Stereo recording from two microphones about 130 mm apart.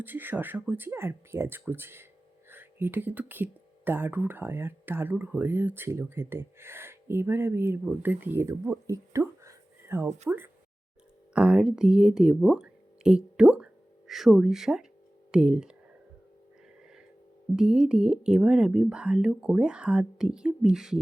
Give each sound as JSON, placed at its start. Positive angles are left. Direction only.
{"t": 0.0, "sound": "speech", "side_deg": -15}
{"t": 17.6, "sound": "speech", "side_deg": -5}